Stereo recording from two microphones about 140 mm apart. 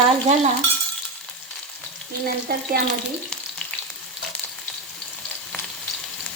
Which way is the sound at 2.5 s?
90° right.